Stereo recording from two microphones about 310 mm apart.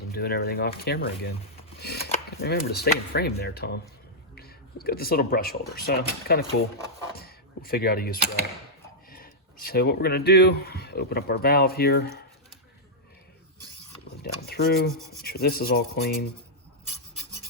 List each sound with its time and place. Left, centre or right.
0.1 s speech: left
14.2 s rub: left
15.2 s speech: left